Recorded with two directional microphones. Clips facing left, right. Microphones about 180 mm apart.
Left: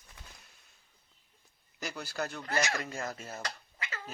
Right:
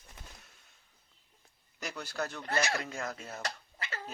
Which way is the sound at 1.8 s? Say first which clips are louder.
Even; centre (ahead or behind).